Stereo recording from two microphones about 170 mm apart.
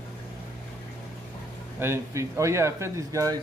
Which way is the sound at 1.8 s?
15° right (ahead or behind).